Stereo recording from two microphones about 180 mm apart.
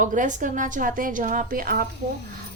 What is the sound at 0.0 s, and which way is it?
A woman's voice, 45° right (ahead or behind).